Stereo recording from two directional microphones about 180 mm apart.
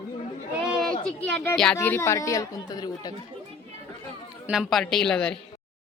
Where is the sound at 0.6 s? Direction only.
Centre (ahead or behind).